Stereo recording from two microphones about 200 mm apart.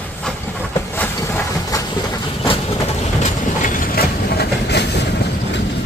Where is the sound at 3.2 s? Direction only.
40° left (ahead or behind); by 5.6 s 55° left (ahead or behind).